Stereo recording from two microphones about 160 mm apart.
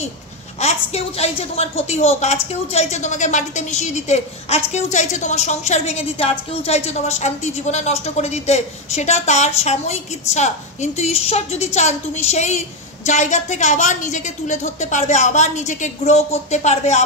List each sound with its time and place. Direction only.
0.6 s a woman's voice: 40° left (ahead or behind)